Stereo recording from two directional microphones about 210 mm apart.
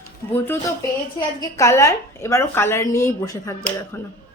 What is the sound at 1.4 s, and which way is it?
A woman's voice, 15° left (ahead or behind).